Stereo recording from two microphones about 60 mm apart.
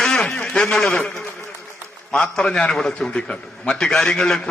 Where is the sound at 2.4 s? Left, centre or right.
Centre.